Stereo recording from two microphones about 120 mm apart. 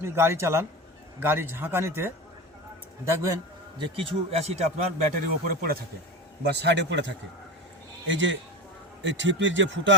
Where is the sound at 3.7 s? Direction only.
45° right (ahead or behind); by 4.7 s 65° right (ahead or behind).